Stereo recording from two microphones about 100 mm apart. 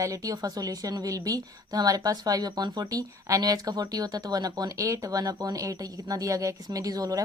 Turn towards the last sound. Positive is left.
turn(degrees=-35)  # may be behind; listen again after turning